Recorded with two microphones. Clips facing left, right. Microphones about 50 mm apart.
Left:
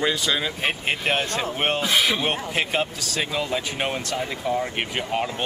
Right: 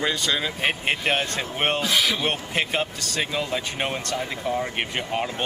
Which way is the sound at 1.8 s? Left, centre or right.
Centre.